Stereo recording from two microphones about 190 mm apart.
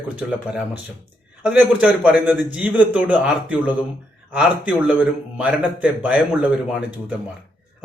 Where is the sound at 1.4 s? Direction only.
5° right (ahead or behind).